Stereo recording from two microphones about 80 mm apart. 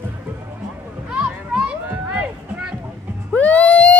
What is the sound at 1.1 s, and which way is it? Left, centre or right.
Music, centre.